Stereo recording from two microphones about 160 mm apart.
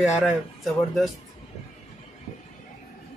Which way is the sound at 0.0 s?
Centre (ahead or behind).